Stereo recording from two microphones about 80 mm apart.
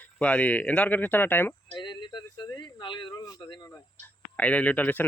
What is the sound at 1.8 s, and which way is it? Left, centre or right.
Speech, left.